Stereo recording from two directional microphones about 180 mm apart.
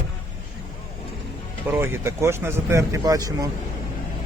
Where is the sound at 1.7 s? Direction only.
15° right (ahead or behind).